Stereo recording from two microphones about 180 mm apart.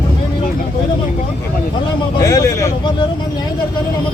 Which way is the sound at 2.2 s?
20° left (ahead or behind).